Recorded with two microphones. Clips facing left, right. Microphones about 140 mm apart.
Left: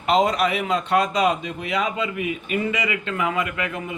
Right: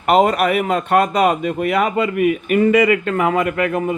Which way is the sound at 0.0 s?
55° right (ahead or behind).